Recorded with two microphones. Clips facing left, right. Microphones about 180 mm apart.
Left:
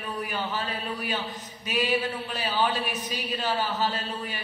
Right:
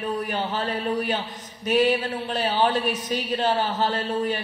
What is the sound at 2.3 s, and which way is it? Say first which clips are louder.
A woman's voice: right 5 dB; 45° right (ahead or behind).